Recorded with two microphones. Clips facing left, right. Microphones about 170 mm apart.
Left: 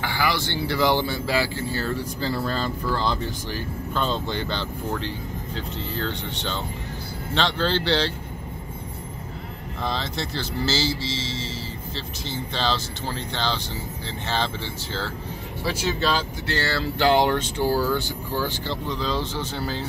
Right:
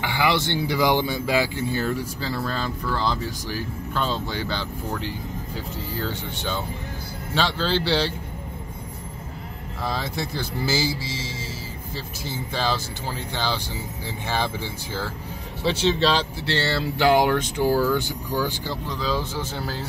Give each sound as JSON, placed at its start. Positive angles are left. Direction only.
{"t": 0.0, "sound": "speech", "side_deg": -20}
{"t": 9.8, "sound": "speech", "side_deg": -10}
{"t": 15.6, "sound": "speech", "side_deg": -25}
{"t": 17.0, "sound": "speech", "side_deg": -10}